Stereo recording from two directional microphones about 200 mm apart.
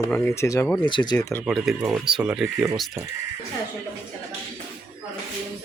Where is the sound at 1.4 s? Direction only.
Centre (ahead or behind).